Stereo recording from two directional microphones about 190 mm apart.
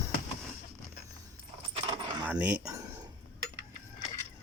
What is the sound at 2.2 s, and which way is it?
Cutlery, 5° right (ahead or behind).